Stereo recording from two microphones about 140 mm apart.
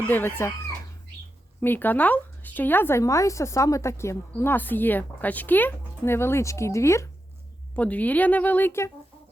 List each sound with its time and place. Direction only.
0.1 s speech: 15° left (ahead or behind)
1.6 s speech: 15° left (ahead or behind)